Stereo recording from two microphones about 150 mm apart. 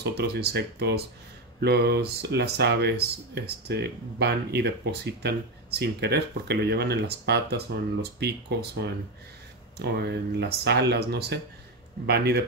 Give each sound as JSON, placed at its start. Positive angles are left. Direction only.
{"t": 0.2, "sound": "speech", "side_deg": -90}